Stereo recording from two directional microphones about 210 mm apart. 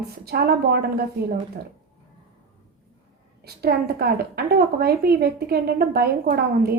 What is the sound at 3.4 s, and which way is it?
A woman's voice, 50° right (ahead or behind).